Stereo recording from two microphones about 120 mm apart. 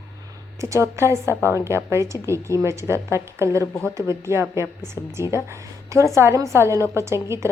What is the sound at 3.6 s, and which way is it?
Speech, 15° left (ahead or behind).